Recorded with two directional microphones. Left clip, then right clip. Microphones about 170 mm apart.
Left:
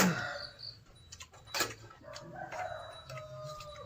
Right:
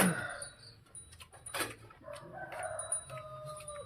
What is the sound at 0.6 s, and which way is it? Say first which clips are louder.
Dog: left 10 dB; 5° right (ahead or behind).